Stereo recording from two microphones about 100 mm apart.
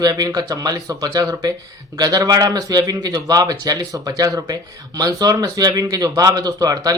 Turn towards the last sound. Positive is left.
turn(degrees=-40)  # may be behind; listen again after turning